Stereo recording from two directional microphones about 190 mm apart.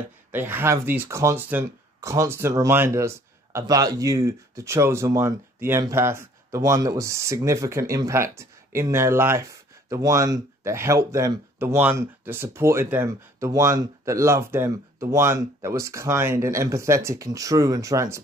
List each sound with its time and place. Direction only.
0.3 s speech: 10° right (ahead or behind)